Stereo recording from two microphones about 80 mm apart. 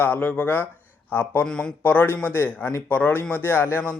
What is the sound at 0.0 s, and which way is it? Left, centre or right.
Speech, left.